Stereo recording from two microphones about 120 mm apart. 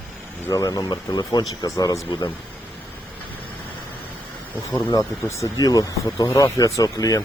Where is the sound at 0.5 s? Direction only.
30° left (ahead or behind).